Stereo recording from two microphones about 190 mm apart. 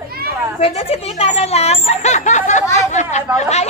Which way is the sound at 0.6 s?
30° left (ahead or behind).